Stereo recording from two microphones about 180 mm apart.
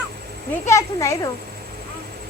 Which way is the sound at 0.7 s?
15° left (ahead or behind).